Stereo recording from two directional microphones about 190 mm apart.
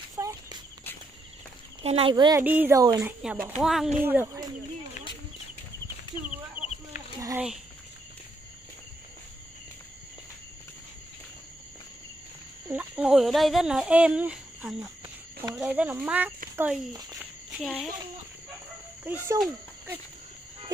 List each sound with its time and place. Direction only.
0.1 s a sound: 20° right (ahead or behind)
1.8 s speech: 30° right (ahead or behind)
2.4 s speech: 10° right (ahead or behind)
6.6 s chicken: 10° right (ahead or behind)
7.2 s a sound: 15° right (ahead or behind)
12.6 s speech: 10° right (ahead or behind)
17.6 s speech: 5° left (ahead or behind)
19.0 s speech: 10° right (ahead or behind)